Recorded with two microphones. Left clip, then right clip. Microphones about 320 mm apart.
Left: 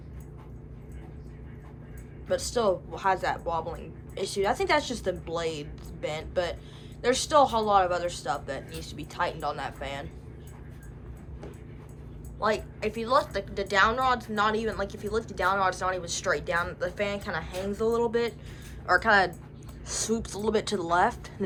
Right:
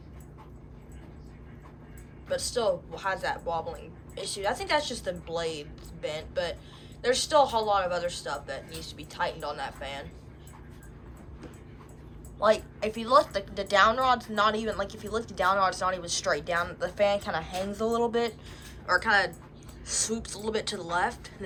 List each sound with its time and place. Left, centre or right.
2.2 s speech: centre
12.4 s a woman's voice: centre